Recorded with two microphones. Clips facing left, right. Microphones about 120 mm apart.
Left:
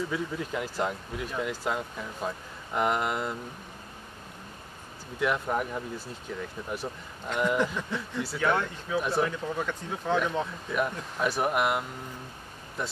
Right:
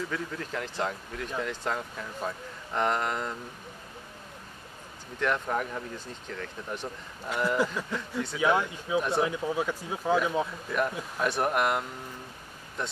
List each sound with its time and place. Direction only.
0.1 s speech: 10° left (ahead or behind)
5.2 s speech: 5° left (ahead or behind)
7.2 s speech: 5° right (ahead or behind)
8.4 s speech: 10° right (ahead or behind)